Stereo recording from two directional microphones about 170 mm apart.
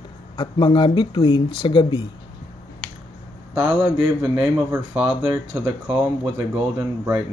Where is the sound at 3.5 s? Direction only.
10° right (ahead or behind).